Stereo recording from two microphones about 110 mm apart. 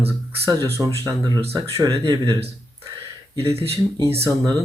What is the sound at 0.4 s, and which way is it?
Speech, 25° right (ahead or behind).